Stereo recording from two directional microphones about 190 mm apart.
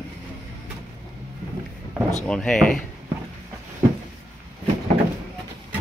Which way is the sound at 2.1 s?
5° left (ahead or behind).